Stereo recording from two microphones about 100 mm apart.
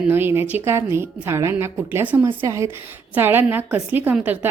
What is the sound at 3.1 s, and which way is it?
A woman's voice, 20° right (ahead or behind).